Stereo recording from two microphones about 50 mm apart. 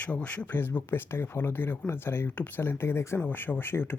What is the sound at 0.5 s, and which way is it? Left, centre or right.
Speech, left.